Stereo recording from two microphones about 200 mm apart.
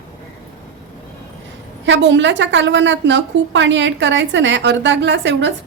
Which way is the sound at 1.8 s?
65° right (ahead or behind).